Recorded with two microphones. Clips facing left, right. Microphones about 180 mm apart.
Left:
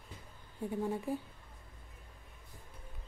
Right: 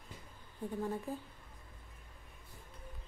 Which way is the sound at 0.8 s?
10° left (ahead or behind).